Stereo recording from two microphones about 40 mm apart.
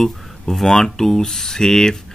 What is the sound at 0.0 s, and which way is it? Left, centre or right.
Speech, centre.